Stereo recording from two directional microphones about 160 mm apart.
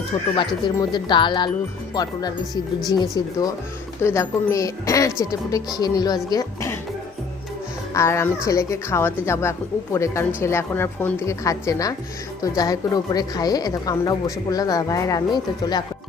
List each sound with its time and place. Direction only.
0.3 s a woman's voice: 30° left (ahead or behind)
3.0 s a woman's voice: 25° left (ahead or behind)
6.3 s music: 20° left (ahead or behind)
7.9 s a woman's voice: 15° left (ahead or behind)